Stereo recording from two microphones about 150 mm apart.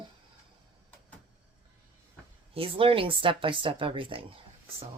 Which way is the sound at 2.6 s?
40° right (ahead or behind).